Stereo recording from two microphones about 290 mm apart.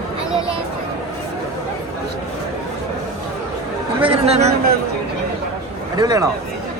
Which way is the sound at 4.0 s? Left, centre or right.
Centre.